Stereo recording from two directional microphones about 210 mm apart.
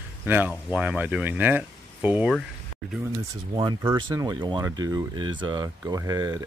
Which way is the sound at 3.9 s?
15° right (ahead or behind).